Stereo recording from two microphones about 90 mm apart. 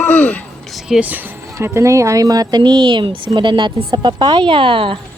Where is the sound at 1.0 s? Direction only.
20° right (ahead or behind).